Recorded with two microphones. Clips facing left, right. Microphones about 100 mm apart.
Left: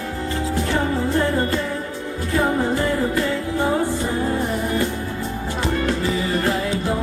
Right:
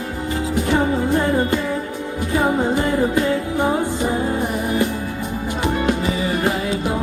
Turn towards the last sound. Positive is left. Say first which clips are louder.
# right 1 dB
turn(degrees=-15)  # may be behind; listen again after turning